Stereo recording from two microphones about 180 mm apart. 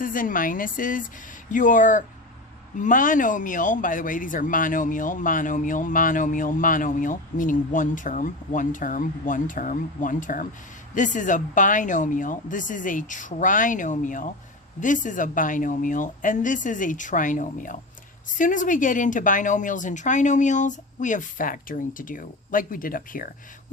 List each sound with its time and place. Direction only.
0.0 s speech: 50° left (ahead or behind)